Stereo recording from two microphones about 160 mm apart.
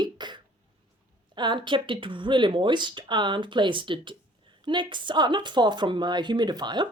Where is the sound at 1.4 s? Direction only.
30° right (ahead or behind).